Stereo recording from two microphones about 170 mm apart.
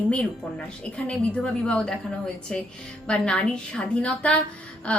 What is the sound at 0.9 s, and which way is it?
A woman's voice, 5° left (ahead or behind).